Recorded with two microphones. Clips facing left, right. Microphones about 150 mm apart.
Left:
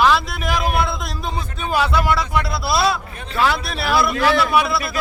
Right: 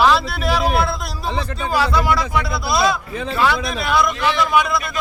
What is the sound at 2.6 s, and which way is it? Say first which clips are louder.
Speech: right 1 dB; 30° left (ahead or behind).